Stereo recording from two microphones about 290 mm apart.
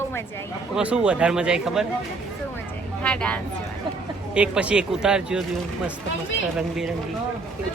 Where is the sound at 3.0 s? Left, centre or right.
Centre.